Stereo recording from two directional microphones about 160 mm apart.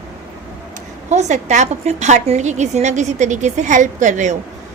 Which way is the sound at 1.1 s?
45° right (ahead or behind).